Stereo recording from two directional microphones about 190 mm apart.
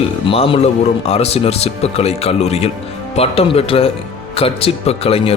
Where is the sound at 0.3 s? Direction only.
30° left (ahead or behind).